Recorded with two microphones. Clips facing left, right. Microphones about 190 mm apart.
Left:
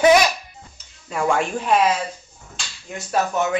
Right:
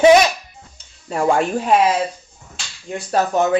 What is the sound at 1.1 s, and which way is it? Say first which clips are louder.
Speech: right 4 dB; 35° right (ahead or behind).